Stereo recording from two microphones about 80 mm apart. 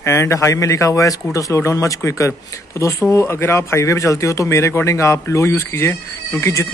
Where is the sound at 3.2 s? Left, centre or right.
Left.